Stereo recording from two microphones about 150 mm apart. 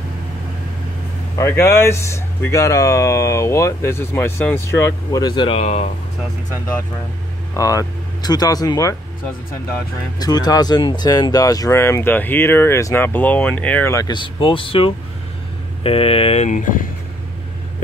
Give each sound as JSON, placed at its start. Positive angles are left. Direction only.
{"t": 1.4, "sound": "speech", "side_deg": 15}
{"t": 5.2, "sound": "speech", "side_deg": 30}
{"t": 5.6, "sound": "speech", "side_deg": 45}
{"t": 7.5, "sound": "speech", "side_deg": 20}
{"t": 10.1, "sound": "speech", "side_deg": 25}
{"t": 14.1, "sound": "speech", "side_deg": 35}
{"t": 16.4, "sound": "speech", "side_deg": 60}